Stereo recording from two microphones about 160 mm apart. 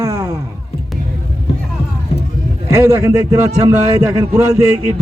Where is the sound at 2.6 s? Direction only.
15° right (ahead or behind).